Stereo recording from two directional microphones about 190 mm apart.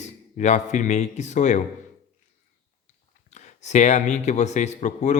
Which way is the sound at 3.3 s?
35° left (ahead or behind).